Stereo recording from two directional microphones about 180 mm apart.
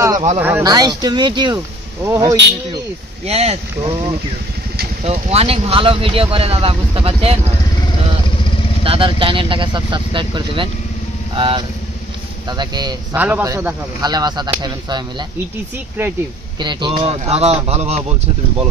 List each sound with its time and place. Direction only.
0.4 s speech: 10° right (ahead or behind)
0.7 s speech: 20° right (ahead or behind)
3.3 s speech: 35° right (ahead or behind)
8.8 s speech: 30° right (ahead or behind)
13.1 s speech: 10° right (ahead or behind)
16.0 s speech: 10° right (ahead or behind)
16.5 s speech: 25° right (ahead or behind)